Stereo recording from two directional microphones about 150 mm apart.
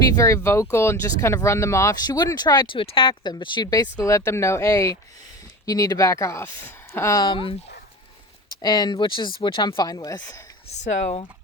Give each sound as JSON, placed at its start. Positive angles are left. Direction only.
{"t": 0.1, "sound": "speech", "side_deg": 20}
{"t": 8.6, "sound": "speech", "side_deg": 25}
{"t": 10.7, "sound": "speech", "side_deg": 45}